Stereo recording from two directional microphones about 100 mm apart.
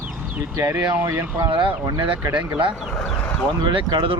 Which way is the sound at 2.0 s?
60° right (ahead or behind).